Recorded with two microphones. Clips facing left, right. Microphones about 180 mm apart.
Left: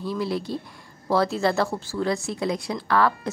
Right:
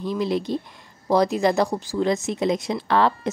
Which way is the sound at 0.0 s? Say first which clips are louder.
Right 3 dB; 20° right (ahead or behind).